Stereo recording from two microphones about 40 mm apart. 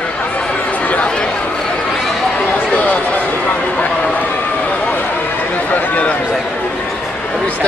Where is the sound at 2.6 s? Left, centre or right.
Left.